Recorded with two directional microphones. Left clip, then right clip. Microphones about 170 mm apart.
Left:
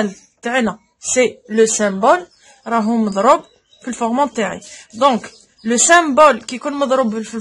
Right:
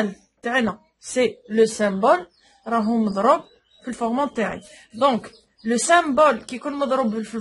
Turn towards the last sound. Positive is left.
turn(degrees=35)  # may be behind; listen again after turning